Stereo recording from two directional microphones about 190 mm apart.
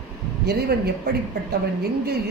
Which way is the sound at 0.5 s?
60° right (ahead or behind).